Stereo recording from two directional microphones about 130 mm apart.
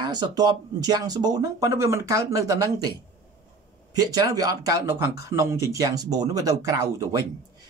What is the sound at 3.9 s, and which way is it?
Speech, 30° right (ahead or behind).